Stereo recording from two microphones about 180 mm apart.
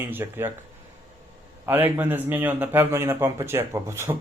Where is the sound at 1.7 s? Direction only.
10° right (ahead or behind).